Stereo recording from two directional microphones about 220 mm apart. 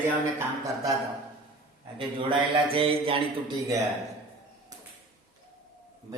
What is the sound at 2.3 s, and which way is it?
Speech, 25° right (ahead or behind).